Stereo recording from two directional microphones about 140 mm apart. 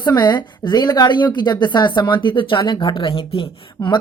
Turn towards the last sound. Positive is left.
turn(degrees=35)  # may be behind; listen again after turning